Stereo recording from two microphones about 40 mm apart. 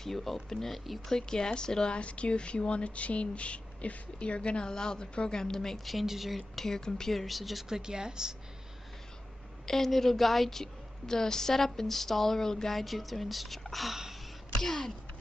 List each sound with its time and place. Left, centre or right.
0.0 s a woman's voice: centre
2.0 s speech: left
5.9 s speech: centre
6.5 s a woman's voice: centre
7.7 s speech: centre
9.7 s a woman's voice: centre